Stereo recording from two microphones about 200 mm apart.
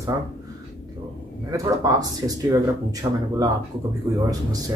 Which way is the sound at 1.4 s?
15° right (ahead or behind).